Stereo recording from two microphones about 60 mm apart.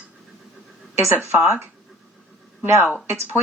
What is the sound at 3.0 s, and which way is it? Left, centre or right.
Speech, right.